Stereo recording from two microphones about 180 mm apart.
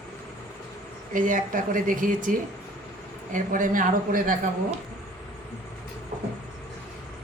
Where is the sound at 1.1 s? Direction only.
50° right (ahead or behind).